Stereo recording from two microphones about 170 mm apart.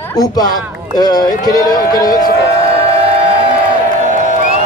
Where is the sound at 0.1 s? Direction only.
20° left (ahead or behind).